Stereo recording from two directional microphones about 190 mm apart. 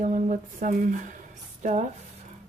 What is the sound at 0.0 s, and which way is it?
Speech, 45° right (ahead or behind).